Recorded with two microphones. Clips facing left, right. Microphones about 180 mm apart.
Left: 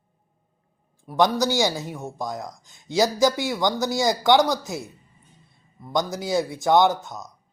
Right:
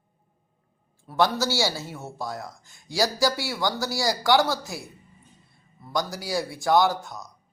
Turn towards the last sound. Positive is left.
turn(degrees=20)  # may be behind; listen again after turning